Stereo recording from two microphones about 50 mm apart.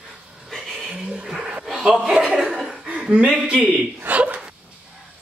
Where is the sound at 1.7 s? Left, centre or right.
Centre.